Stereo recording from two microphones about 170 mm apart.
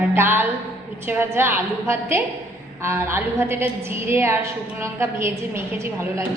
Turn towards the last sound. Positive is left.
turn(degrees=-15)  # may be behind; listen again after turning